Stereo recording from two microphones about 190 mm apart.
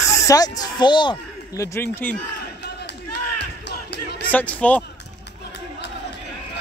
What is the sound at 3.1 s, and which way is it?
Crowd, 60° left (ahead or behind).